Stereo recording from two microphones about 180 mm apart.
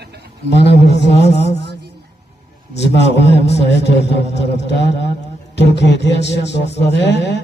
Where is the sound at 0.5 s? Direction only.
70° left (ahead or behind).